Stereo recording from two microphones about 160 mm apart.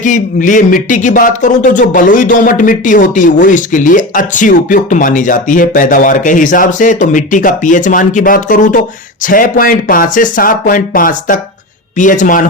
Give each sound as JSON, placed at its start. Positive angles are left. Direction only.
{"t": 0.0, "sound": "a man's voice", "side_deg": 50}